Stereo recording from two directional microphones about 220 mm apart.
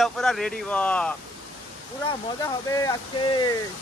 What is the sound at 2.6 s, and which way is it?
Speech, 15° left (ahead or behind).